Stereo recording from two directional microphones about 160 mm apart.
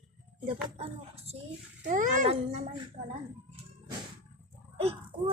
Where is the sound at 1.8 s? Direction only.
50° right (ahead or behind).